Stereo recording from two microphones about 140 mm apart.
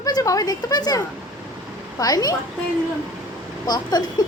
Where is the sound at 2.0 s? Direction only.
25° left (ahead or behind).